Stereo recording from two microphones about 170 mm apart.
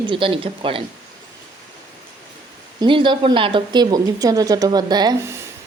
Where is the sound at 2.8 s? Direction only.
30° right (ahead or behind).